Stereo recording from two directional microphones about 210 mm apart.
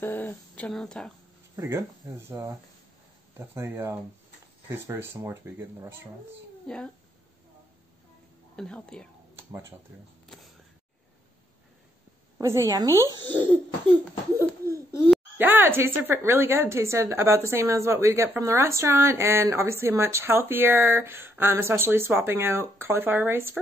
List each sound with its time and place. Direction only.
0.0 s speech: 10° left (ahead or behind)
1.6 s speech: 15° right (ahead or behind)
6.7 s speech: 5° left (ahead or behind)
8.5 s speech: 5° left (ahead or behind)
9.4 s speech: 10° right (ahead or behind)
10.2 s a sound: centre (ahead or behind)
12.4 s speech: 15° right (ahead or behind)
15.0 s speech: 10° right (ahead or behind)